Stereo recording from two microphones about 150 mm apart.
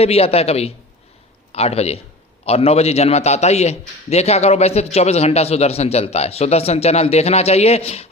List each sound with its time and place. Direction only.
0.0 s a man's voice: 40° left (ahead or behind)